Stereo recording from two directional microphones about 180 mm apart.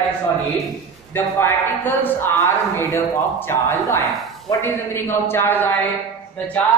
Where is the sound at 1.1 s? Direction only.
10° left (ahead or behind).